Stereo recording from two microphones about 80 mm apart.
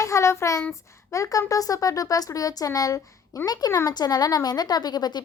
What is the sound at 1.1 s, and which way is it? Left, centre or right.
A woman's voice, left.